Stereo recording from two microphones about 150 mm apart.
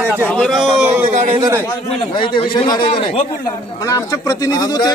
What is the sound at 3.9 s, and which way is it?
Speech, 20° left (ahead or behind).